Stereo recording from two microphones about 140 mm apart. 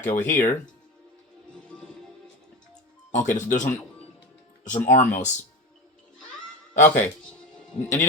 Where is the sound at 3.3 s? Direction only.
60° left (ahead or behind).